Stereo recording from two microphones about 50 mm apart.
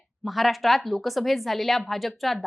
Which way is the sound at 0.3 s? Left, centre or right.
Centre.